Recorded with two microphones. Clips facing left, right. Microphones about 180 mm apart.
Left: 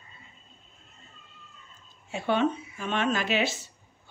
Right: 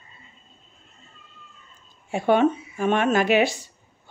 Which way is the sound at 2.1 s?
50° right (ahead or behind).